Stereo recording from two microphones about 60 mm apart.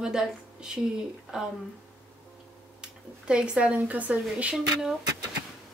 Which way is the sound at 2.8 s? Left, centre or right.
Centre.